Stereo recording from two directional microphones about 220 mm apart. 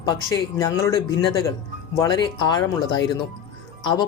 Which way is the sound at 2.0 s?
20° left (ahead or behind).